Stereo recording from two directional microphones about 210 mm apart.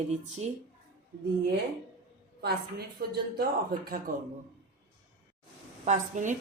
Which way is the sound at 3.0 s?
45° right (ahead or behind).